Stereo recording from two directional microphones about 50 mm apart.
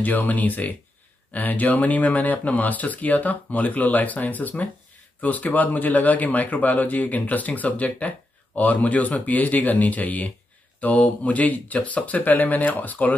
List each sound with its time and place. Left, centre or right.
0.0 s speech: left